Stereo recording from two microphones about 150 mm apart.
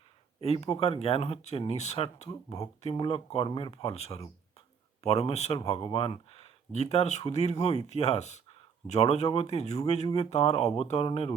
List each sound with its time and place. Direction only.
0.4 s speech: 40° left (ahead or behind)
2.9 s speech: 35° left (ahead or behind)